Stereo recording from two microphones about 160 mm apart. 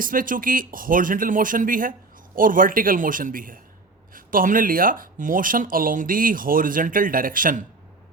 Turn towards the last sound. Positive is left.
turn(degrees=-60)  # may be behind; listen again after turning